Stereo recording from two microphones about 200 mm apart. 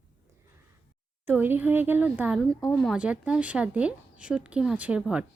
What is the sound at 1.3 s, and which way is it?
Speech, 10° right (ahead or behind).